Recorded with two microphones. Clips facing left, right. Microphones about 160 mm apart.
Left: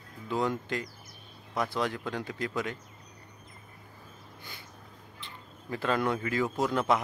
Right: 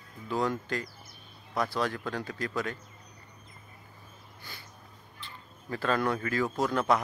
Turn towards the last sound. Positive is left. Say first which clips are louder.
# even
turn(degrees=15)  # may be behind; listen again after turning